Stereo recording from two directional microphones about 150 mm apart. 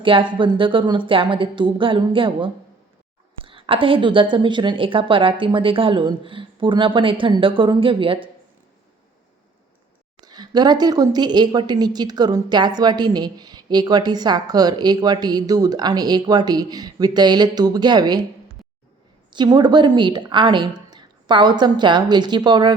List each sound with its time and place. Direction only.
0.0 s a woman's voice: 35° right (ahead or behind)
10.2 s a woman's voice: 25° right (ahead or behind)
19.3 s a woman's voice: 30° right (ahead or behind)